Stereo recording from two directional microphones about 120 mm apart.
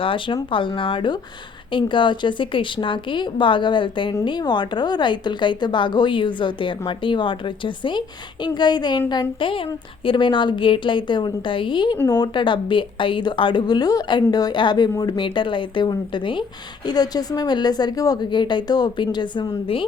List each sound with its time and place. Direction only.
0.0 s a woman's voice: 45° left (ahead or behind)